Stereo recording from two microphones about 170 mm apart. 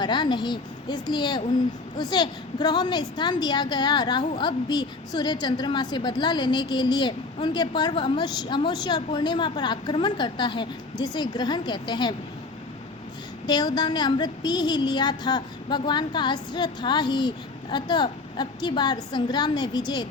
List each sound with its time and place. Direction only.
0.0 s a woman's voice: 25° left (ahead or behind)
13.5 s a woman's voice: 25° left (ahead or behind)